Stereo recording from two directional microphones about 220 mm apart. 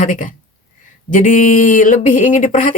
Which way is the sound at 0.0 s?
35° left (ahead or behind).